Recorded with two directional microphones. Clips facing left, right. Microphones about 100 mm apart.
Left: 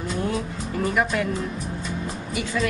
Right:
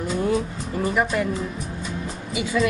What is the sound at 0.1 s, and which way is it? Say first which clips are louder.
A woman's voice: right 4 dB; centre (ahead or behind).